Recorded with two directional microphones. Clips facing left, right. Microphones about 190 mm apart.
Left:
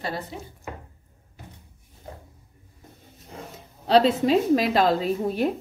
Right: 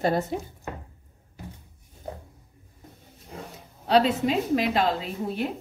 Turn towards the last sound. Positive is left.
turn(degrees=40)  # may be behind; listen again after turning